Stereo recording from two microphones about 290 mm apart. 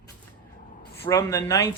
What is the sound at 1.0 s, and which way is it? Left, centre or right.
Speech, centre.